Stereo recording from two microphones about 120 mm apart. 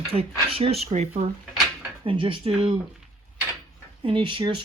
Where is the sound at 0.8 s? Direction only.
75° right (ahead or behind).